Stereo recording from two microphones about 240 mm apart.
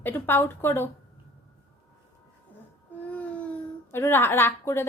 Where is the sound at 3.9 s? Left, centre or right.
Centre.